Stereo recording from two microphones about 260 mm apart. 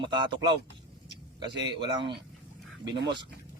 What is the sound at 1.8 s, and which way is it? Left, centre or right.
Speech, centre.